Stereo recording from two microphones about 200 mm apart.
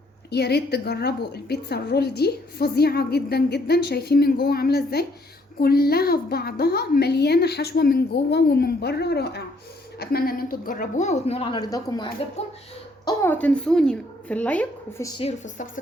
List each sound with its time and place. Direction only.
0.3 s a woman's voice: 55° left (ahead or behind); by 15.1 s 10° left (ahead or behind)
15.2 s a woman's voice: 35° left (ahead or behind)